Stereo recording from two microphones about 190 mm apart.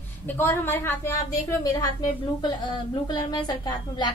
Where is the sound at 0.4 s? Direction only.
10° left (ahead or behind).